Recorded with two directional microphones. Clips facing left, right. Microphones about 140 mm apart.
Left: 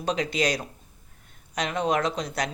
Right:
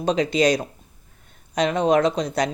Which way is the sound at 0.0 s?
25° right (ahead or behind).